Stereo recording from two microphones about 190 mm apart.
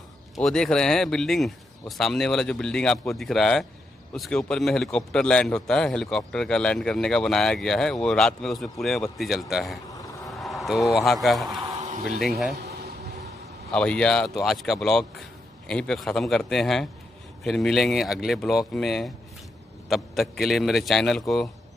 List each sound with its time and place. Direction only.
0.4 s a man's voice: 5° left (ahead or behind)
11.8 s a sound: 40° right (ahead or behind)
12.2 s a man's voice: centre (ahead or behind)
13.7 s a man's voice: 5° left (ahead or behind)